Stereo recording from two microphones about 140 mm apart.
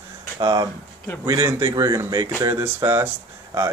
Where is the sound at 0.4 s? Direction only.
30° right (ahead or behind).